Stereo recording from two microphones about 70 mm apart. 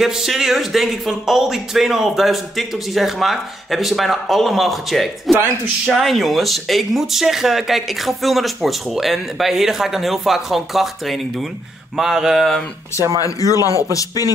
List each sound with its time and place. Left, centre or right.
0.0 s speech: centre
13.2 s speech: left